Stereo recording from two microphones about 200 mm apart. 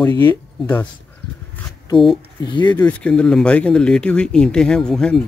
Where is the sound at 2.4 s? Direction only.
20° left (ahead or behind).